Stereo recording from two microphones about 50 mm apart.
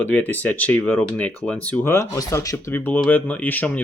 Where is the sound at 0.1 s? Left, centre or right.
Left.